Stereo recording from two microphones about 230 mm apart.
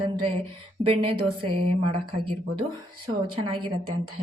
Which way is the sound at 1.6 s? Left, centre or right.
Right.